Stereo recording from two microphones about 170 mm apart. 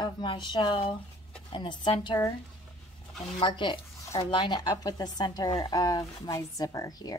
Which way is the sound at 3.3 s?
30° left (ahead or behind).